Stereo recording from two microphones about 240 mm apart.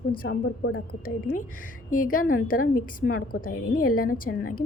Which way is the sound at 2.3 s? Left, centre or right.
Left.